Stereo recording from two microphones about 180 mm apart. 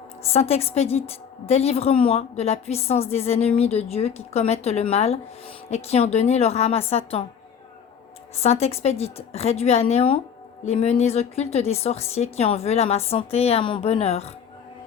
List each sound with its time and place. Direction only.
0.3 s a woman's voice: 35° left (ahead or behind)
8.4 s a woman's voice: 35° left (ahead or behind)